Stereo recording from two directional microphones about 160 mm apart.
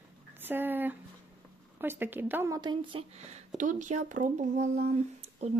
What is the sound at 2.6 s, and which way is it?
Speech, 30° right (ahead or behind).